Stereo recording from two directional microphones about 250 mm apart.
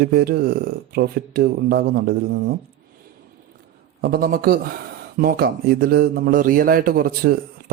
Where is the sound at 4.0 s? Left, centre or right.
Right.